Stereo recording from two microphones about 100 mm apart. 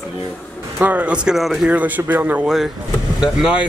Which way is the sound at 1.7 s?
15° right (ahead or behind).